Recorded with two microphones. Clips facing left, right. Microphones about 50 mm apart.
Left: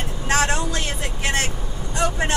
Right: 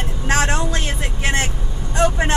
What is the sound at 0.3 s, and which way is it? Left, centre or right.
Vehicle, right.